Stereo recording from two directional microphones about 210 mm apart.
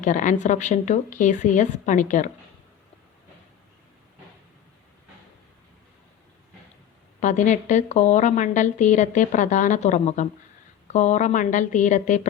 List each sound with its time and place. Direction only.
0.0 s a woman's voice: 35° left (ahead or behind)
7.2 s a woman's voice: 35° left (ahead or behind)